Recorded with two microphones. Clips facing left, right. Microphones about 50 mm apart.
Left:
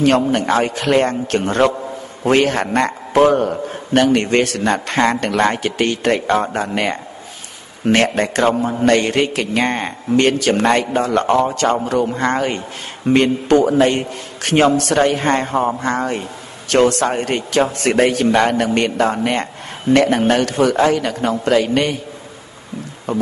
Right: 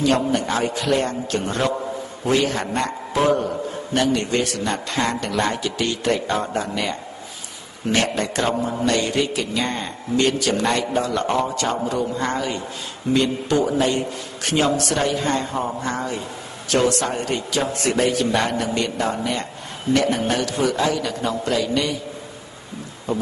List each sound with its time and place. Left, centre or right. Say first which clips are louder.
0.0 s a man's voice: left 5 dB; left
23.1 s a man's voice: left 5 dB; left